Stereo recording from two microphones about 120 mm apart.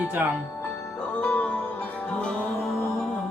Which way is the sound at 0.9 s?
10° left (ahead or behind).